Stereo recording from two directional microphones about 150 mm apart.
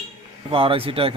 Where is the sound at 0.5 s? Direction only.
35° right (ahead or behind).